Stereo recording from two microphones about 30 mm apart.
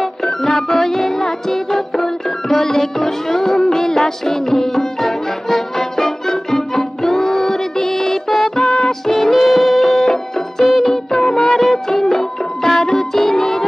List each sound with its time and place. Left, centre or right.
0.2 s music: centre
9.0 s music: centre
10.6 s music of bollywood: centre
11.2 s music: centre